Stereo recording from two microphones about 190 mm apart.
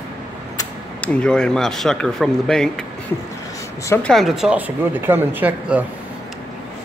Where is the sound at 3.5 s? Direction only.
15° left (ahead or behind).